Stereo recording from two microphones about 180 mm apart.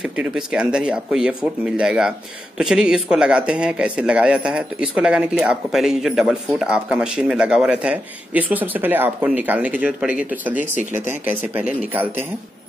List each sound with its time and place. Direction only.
0.0 s speech: 5° right (ahead or behind)
10.6 s speech: 45° left (ahead or behind)
11.1 s speech: 10° right (ahead or behind)